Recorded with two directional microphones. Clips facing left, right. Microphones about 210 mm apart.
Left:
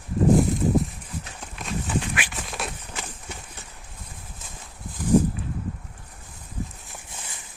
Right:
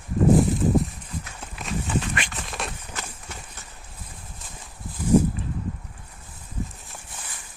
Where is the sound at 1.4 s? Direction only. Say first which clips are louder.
Right 1 dB; centre (ahead or behind).